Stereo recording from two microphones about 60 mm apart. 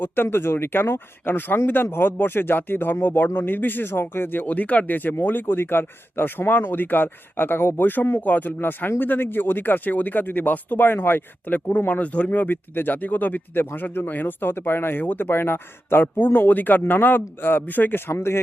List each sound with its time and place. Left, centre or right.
0.0 s speech: left
18.1 s speech: left